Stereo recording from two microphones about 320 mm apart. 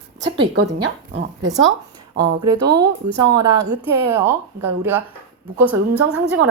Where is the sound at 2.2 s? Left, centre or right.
Right.